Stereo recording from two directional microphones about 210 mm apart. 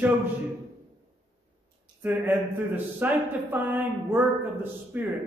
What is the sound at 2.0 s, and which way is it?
Speech, 10° right (ahead or behind).